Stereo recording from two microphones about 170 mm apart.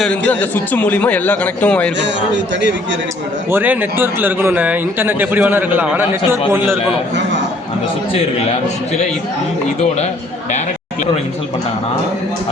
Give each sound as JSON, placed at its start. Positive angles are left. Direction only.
{"t": 0.0, "sound": "a man's voice", "side_deg": 10}
{"t": 2.0, "sound": "a man's voice", "side_deg": -90}
{"t": 3.5, "sound": "speech", "side_deg": -10}